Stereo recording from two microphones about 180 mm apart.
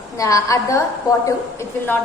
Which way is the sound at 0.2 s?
20° left (ahead or behind).